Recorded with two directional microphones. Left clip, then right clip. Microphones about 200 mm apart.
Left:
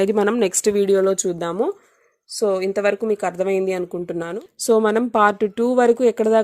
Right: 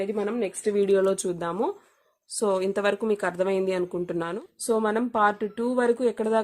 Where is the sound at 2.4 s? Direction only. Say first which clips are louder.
Left 5 dB; 10° left (ahead or behind).